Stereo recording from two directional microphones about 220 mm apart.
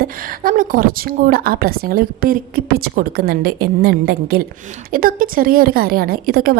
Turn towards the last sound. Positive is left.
turn(degrees=-45)  # may be behind; listen again after turning